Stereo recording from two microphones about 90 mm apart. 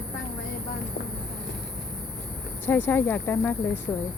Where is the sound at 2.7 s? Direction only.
20° left (ahead or behind).